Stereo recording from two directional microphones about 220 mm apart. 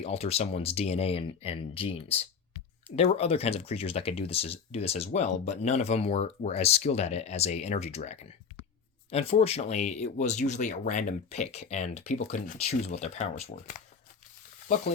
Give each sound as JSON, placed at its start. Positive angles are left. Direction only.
{"t": 0.0, "sound": "speech", "side_deg": 30}